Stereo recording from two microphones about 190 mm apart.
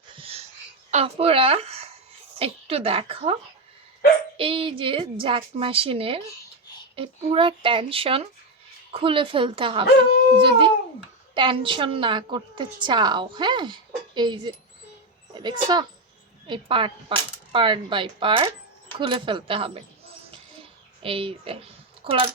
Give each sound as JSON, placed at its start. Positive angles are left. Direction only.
{"t": 0.2, "sound": "a sound", "side_deg": -30}
{"t": 0.9, "sound": "a woman's voice", "side_deg": -35}
{"t": 4.4, "sound": "a woman's voice", "side_deg": -30}
{"t": 21.0, "sound": "a woman's voice", "side_deg": -30}